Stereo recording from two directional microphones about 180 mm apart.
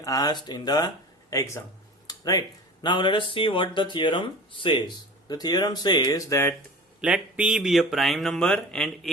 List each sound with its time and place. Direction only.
0.0 s speech: 20° left (ahead or behind)
2.0 s a sound: 20° left (ahead or behind)
2.8 s speech: 25° left (ahead or behind)
7.0 s speech: 5° right (ahead or behind)